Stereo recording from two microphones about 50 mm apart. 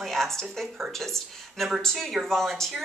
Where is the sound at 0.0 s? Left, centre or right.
Centre.